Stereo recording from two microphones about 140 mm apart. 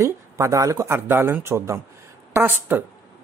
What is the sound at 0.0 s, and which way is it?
Speech, 20° right (ahead or behind).